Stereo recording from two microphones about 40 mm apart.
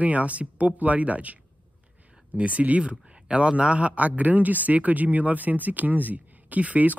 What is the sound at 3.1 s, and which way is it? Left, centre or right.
A man's voice, right.